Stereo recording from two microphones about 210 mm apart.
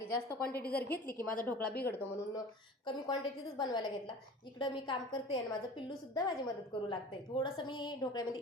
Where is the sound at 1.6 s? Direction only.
50° left (ahead or behind).